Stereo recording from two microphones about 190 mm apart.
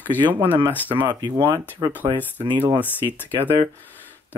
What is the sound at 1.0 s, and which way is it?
Speech, 20° right (ahead or behind).